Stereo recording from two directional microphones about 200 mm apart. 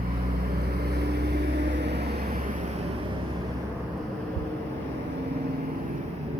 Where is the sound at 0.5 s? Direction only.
50° right (ahead or behind).